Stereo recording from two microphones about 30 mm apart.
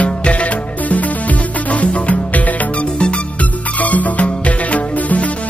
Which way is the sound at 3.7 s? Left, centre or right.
Left.